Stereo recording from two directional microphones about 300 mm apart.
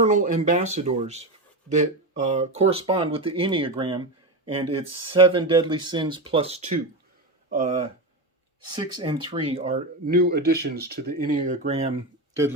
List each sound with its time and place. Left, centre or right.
0.0 s speech: right